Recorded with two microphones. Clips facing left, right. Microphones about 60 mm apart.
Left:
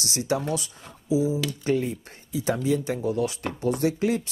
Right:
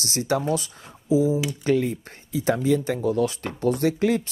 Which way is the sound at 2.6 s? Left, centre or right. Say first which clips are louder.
Right 3 dB; right.